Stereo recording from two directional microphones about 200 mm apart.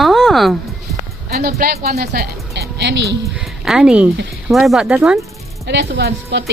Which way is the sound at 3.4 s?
5° right (ahead or behind).